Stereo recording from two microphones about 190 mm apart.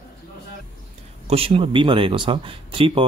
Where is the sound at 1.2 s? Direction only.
30° right (ahead or behind).